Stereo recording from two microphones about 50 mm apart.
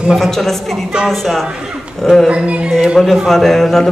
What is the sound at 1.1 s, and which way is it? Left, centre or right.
A man's voice, centre.